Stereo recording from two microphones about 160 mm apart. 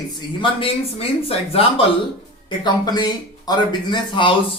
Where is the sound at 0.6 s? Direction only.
35° left (ahead or behind).